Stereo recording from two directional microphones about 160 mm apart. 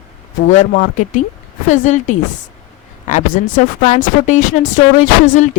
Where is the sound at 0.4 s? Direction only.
50° left (ahead or behind).